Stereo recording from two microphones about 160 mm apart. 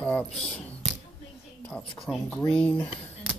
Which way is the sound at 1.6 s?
5° left (ahead or behind).